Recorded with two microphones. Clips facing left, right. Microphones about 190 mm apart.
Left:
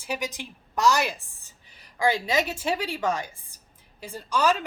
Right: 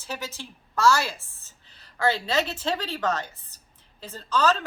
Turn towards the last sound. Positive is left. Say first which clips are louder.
# even
turn(degrees=15)  # may be behind; listen again after turning